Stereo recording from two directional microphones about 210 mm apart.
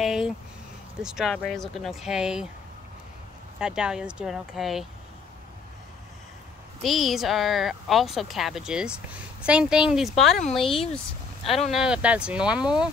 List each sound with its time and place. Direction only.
0.0 s a sound: centre (ahead or behind)
1.0 s speech: centre (ahead or behind)
3.5 s speech: 5° right (ahead or behind)
6.8 s speech: centre (ahead or behind)
11.4 s speech: 30° left (ahead or behind)
11.7 s speech: 5° right (ahead or behind)